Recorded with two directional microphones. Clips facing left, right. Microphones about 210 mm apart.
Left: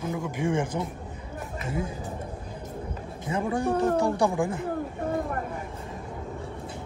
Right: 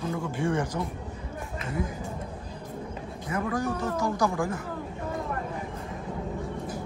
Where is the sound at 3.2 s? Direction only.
25° left (ahead or behind).